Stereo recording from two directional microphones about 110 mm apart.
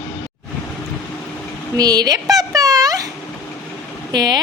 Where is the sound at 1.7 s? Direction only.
35° right (ahead or behind).